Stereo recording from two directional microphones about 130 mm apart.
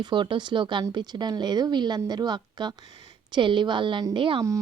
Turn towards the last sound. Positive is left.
turn(degrees=-40)  # may be behind; listen again after turning